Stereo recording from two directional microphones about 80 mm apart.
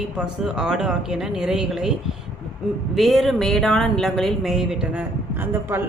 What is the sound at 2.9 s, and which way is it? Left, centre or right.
Speech, centre.